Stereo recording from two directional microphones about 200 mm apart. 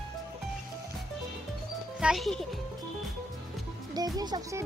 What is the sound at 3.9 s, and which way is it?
Speech, 20° right (ahead or behind).